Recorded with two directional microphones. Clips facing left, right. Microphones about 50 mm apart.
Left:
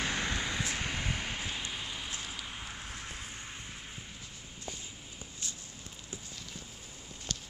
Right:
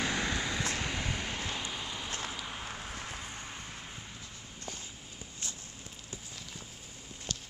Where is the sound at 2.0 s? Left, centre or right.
Right.